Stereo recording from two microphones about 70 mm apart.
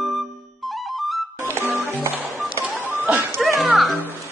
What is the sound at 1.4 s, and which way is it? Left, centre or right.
Music, right.